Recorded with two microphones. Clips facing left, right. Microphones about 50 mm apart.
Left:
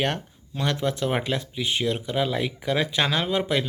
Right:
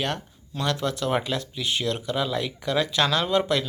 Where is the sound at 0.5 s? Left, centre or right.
Left.